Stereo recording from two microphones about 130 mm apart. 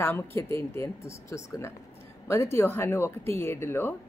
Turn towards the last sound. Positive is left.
turn(degrees=15)  # may be behind; listen again after turning